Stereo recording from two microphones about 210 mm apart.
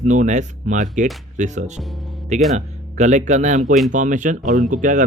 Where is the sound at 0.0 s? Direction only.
35° right (ahead or behind).